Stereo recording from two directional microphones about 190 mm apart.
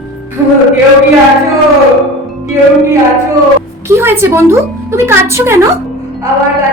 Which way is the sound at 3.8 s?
10° right (ahead or behind).